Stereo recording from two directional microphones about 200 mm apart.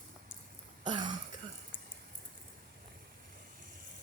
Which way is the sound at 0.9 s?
25° right (ahead or behind).